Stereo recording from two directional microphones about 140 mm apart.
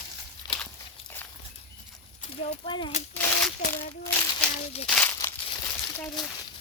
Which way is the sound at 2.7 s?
35° left (ahead or behind).